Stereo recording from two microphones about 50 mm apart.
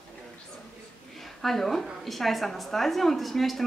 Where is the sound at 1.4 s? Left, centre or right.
Centre.